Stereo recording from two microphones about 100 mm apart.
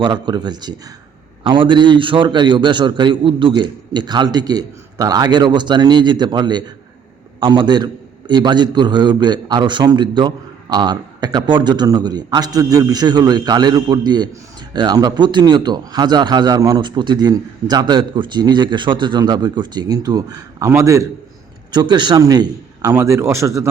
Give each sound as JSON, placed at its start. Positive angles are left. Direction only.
{"t": 0.0, "sound": "a man's voice", "side_deg": -45}
{"t": 16.8, "sound": "a man's voice", "side_deg": -50}
{"t": 20.7, "sound": "a man's voice", "side_deg": -30}
{"t": 21.7, "sound": "a man's voice", "side_deg": -45}
{"t": 22.9, "sound": "a man's voice", "side_deg": -30}